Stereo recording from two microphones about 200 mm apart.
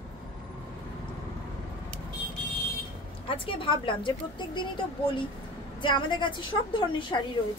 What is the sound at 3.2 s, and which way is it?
A woman's voice, 25° left (ahead or behind).